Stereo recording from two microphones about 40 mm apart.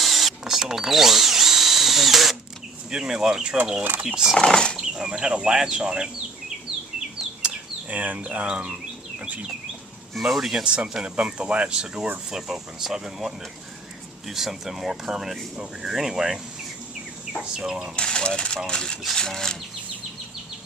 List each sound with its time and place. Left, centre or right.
0.0 s drill: centre
2.9 s speech: centre
4.4 s speech: centre
4.9 s speech: right
7.9 s speech: right
9.1 s bird: right
10.2 s speech: centre
10.6 s speech: right
12.3 s speech: centre
17.4 s speech: centre
17.9 s speech: left